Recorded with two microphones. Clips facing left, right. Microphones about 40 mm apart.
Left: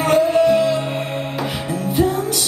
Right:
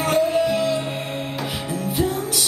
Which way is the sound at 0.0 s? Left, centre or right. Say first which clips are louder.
Left 5 dB; centre.